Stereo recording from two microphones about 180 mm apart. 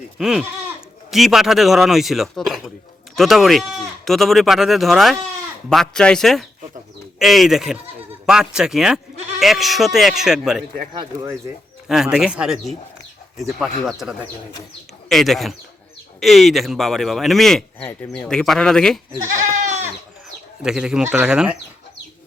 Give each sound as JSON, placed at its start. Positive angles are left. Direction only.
{"t": 0.2, "sound": "speech", "side_deg": -5}
{"t": 10.9, "sound": "speech", "side_deg": -20}
{"t": 11.9, "sound": "speech", "side_deg": -5}
{"t": 19.4, "sound": "goat", "side_deg": -40}
{"t": 20.6, "sound": "speech", "side_deg": -5}